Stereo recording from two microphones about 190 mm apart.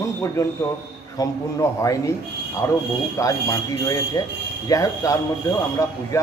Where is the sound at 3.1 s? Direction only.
20° left (ahead or behind).